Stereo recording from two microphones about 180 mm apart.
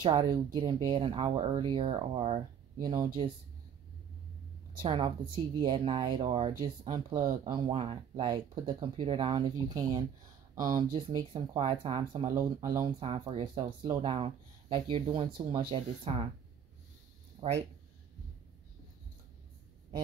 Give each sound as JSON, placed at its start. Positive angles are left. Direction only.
{"t": 0.0, "sound": "speech", "side_deg": -25}
{"t": 2.9, "sound": "speech", "side_deg": -20}
{"t": 4.8, "sound": "speech", "side_deg": -30}
{"t": 11.1, "sound": "speech", "side_deg": -25}
{"t": 12.4, "sound": "speech", "side_deg": -15}